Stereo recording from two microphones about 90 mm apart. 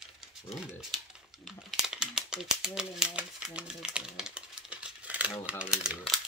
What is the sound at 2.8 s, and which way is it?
Speech, 10° right (ahead or behind).